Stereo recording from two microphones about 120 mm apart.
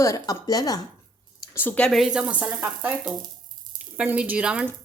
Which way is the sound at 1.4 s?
20° left (ahead or behind).